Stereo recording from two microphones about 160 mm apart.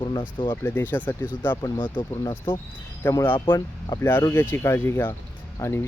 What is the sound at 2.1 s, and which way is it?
Speech, 15° left (ahead or behind).